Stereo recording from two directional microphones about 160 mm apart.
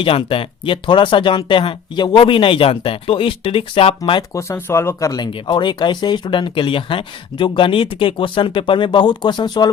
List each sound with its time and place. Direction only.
0.0 s speech: 35° left (ahead or behind)
4.4 s speech: 15° left (ahead or behind)